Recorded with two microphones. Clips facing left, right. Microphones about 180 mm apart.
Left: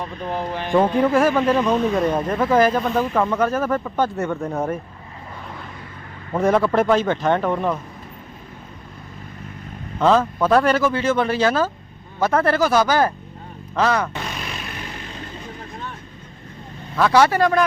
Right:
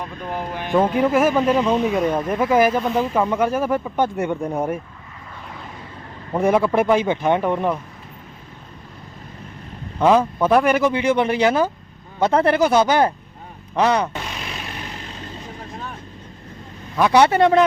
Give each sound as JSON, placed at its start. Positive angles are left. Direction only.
{"t": 0.7, "sound": "speech", "side_deg": -5}
{"t": 6.3, "sound": "speech", "side_deg": -10}
{"t": 10.0, "sound": "speech", "side_deg": -10}
{"t": 17.0, "sound": "speech", "side_deg": -20}